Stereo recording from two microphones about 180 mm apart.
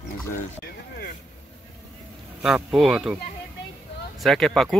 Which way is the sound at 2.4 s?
Centre (ahead or behind).